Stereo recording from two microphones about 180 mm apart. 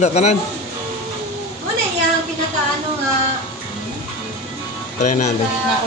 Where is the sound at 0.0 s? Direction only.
40° left (ahead or behind).